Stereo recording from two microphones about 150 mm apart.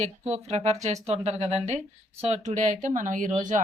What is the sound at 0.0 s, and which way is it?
Speech, 45° right (ahead or behind).